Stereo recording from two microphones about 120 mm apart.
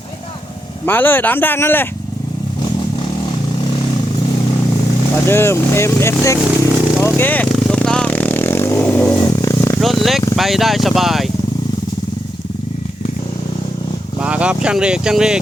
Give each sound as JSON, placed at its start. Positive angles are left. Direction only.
{"t": 0.9, "sound": "speech", "side_deg": 15}
{"t": 5.2, "sound": "speech", "side_deg": 20}
{"t": 7.0, "sound": "a sound", "side_deg": 15}
{"t": 7.4, "sound": "vehicle", "side_deg": 5}
{"t": 9.8, "sound": "a sound", "side_deg": 0}
{"t": 10.3, "sound": "speech", "side_deg": 0}
{"t": 14.2, "sound": "speech", "side_deg": -10}